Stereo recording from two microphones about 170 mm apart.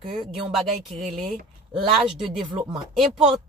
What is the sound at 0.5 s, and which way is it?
Speech, centre (ahead or behind).